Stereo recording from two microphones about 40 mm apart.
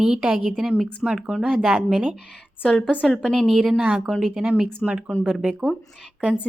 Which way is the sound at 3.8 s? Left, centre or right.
Centre.